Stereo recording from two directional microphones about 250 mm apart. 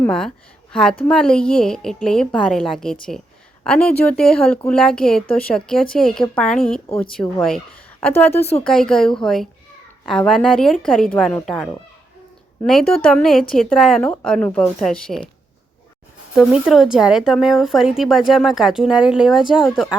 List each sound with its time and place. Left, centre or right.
0.0 s a woman's voice: centre
8.3 s speech: left
8.6 s speech: centre
12.9 s speech: centre
16.3 s speech: centre